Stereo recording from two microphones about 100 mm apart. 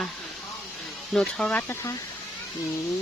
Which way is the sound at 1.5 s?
20° left (ahead or behind).